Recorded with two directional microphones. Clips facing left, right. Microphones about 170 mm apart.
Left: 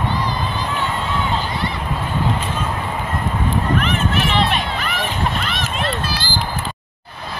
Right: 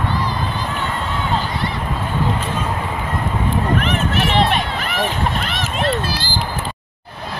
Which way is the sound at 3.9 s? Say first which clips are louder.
Right 1 dB; 50° right (ahead or behind).